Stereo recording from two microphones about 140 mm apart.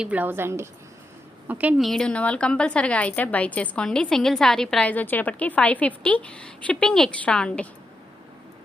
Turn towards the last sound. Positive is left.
turn(degrees=5)  # may be behind; listen again after turning